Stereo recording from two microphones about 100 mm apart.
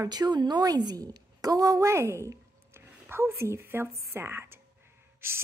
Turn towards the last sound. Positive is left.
turn(degrees=-25)  # may be behind; listen again after turning